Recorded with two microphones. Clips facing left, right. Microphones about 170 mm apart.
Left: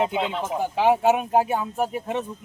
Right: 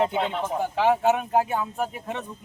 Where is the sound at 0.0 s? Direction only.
5° left (ahead or behind).